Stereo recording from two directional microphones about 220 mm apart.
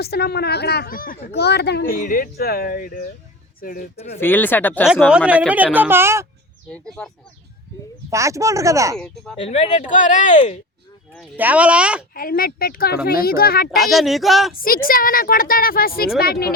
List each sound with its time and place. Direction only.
0.0 s a woman's voice: 45° left (ahead or behind); by 4.2 s 30° left (ahead or behind)
4.2 s speech: 10° left (ahead or behind)
5.0 s speech: 5° right (ahead or behind)
6.7 s speech: 5° left (ahead or behind)
8.1 s speech: 15° right (ahead or behind)
9.0 s speech: 5° left (ahead or behind)
9.4 s a woman's voice: 30° left (ahead or behind)
11.3 s speech: 5° right (ahead or behind)
12.1 s a woman's voice: 40° left (ahead or behind)
13.7 s speech: centre (ahead or behind)
14.5 s a woman's voice: 40° left (ahead or behind)